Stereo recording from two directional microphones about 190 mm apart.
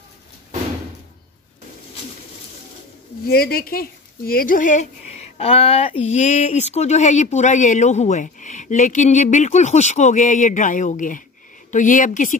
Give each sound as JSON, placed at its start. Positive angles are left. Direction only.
{"t": 3.3, "sound": "speech", "side_deg": 55}
{"t": 5.4, "sound": "speech", "side_deg": 30}